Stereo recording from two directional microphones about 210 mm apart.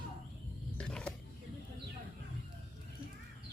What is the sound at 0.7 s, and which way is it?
Wild animals, 5° left (ahead or behind).